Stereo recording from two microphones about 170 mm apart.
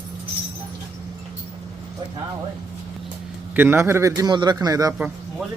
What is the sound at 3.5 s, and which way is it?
A man's voice, 10° right (ahead or behind).